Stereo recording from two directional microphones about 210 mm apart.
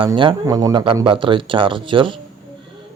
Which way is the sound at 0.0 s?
25° right (ahead or behind).